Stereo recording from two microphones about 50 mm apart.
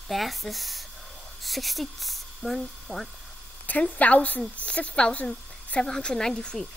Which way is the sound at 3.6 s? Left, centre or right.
Left.